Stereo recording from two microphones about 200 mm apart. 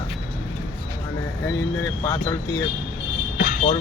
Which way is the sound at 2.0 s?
15° left (ahead or behind).